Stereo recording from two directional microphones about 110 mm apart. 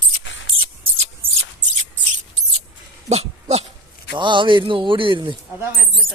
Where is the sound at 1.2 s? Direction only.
60° right (ahead or behind).